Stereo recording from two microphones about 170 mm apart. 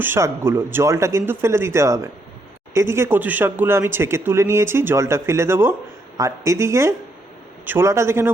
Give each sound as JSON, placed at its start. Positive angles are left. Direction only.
{"t": 0.0, "sound": "speech", "side_deg": -15}